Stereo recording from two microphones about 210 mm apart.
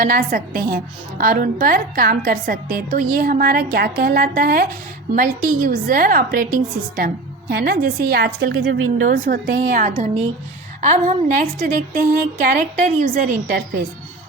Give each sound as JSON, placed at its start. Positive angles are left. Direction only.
{"t": 0.0, "sound": "a woman's voice", "side_deg": -40}